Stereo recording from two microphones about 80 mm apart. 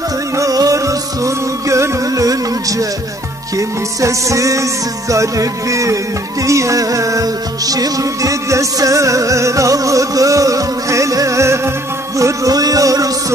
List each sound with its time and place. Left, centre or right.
0.4 s music: right
3.5 s music: right